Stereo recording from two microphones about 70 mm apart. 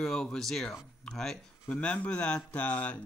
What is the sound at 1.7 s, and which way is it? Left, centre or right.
Speech, centre.